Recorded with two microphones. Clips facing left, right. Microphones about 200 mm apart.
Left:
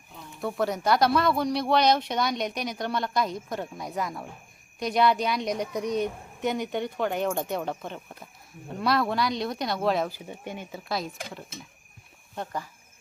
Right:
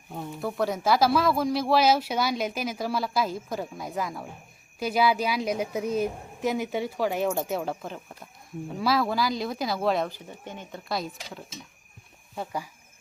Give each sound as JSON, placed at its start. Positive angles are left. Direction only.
{"t": 0.4, "sound": "speech", "side_deg": 0}
{"t": 10.2, "sound": "speech", "side_deg": 10}
{"t": 12.4, "sound": "speech", "side_deg": -10}